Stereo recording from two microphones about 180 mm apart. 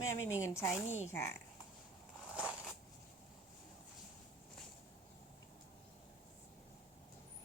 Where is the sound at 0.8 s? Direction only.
40° left (ahead or behind).